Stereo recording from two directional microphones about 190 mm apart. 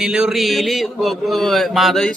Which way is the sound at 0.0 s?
5° right (ahead or behind).